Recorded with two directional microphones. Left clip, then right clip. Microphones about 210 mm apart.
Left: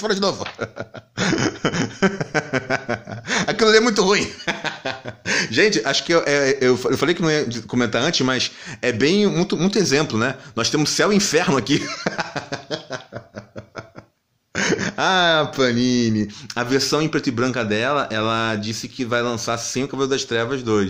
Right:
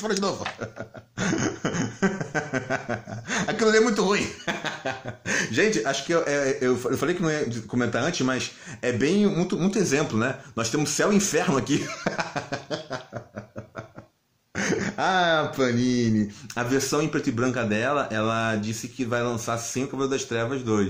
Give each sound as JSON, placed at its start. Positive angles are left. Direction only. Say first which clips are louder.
{"t": 0.0, "sound": "speech", "louder": "left 5 dB", "side_deg": 40}
{"t": 14.5, "sound": "speech", "louder": "left 6 dB", "side_deg": 40}